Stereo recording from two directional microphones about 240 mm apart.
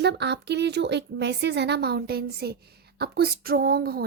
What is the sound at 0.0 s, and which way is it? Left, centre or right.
Speech, right.